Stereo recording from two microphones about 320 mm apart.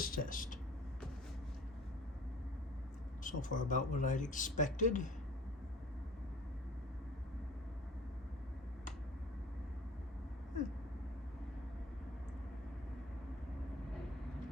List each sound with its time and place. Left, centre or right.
0.0 s speech: left
3.2 s speech: left